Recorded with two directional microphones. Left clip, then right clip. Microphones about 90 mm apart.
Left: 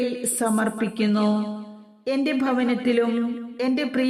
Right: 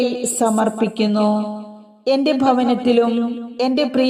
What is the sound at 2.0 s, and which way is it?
Speech, 30° right (ahead or behind).